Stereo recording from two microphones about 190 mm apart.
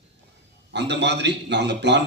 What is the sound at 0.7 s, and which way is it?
Speech, 65° right (ahead or behind).